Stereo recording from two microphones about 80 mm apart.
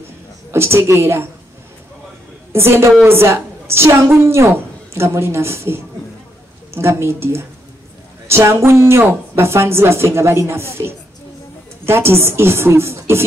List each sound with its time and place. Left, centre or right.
0.5 s a woman's voice: right
2.5 s a woman's voice: right